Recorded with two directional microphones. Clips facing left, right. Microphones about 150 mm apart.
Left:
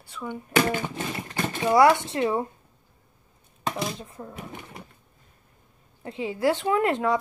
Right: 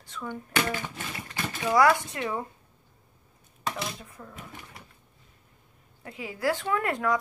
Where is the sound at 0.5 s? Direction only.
25° left (ahead or behind).